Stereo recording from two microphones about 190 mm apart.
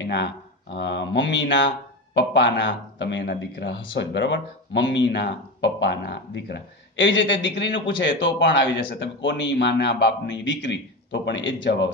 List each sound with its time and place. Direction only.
0.0 s speech: 65° left (ahead or behind)